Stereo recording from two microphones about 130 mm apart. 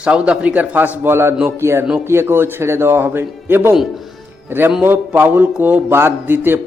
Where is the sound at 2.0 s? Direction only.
20° right (ahead or behind).